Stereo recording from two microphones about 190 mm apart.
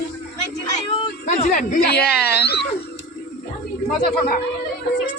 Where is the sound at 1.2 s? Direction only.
45° left (ahead or behind).